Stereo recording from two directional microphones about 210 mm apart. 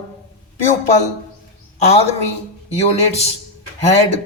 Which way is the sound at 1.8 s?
30° left (ahead or behind).